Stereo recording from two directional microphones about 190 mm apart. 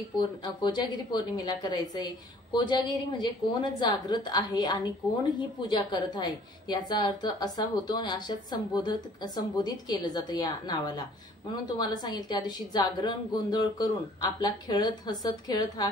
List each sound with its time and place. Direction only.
0.4 s a woman's voice: 25° left (ahead or behind)